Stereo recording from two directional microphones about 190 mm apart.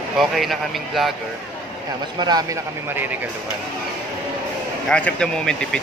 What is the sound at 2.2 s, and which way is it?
Speech, 20° right (ahead or behind).